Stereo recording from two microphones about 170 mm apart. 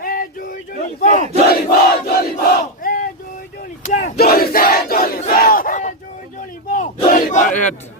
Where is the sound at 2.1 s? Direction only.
65° left (ahead or behind).